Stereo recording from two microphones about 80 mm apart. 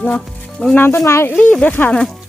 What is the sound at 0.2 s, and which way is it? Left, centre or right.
Speech, centre.